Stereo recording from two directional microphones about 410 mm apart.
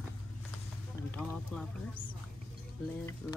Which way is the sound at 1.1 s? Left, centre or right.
Centre.